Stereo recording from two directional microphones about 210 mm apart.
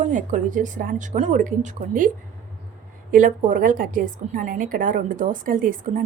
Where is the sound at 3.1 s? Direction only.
40° right (ahead or behind).